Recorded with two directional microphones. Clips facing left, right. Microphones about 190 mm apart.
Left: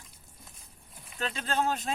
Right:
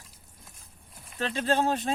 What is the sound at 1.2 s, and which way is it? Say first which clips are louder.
Speech: right 4 dB; 35° right (ahead or behind).